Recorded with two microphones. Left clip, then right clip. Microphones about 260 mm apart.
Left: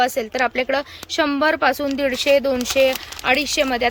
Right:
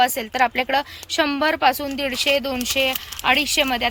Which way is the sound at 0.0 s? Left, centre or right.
Centre.